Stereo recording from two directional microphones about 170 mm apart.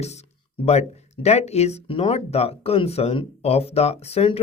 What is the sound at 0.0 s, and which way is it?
Speech, 40° left (ahead or behind).